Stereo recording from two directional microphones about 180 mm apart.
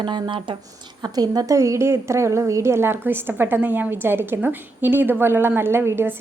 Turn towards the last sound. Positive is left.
turn(degrees=-10)  # may be behind; listen again after turning